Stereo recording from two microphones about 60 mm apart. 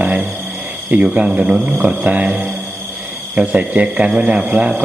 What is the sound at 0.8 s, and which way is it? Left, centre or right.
Speech, right.